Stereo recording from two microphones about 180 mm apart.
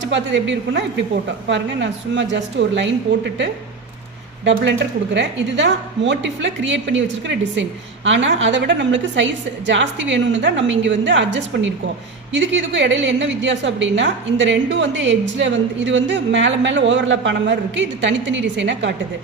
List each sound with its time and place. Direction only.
0.0 s a woman's voice: 90° right
5.1 s a woman's voice: 80° right